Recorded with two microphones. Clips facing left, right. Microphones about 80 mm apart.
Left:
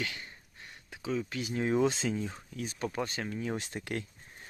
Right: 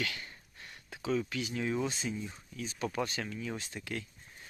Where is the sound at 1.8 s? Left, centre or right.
Left.